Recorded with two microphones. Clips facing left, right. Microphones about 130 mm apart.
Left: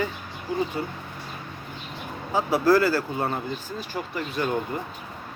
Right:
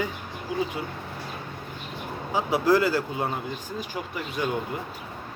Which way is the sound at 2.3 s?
15° right (ahead or behind).